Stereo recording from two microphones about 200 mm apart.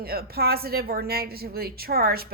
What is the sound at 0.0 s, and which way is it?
A woman's voice, 50° right (ahead or behind).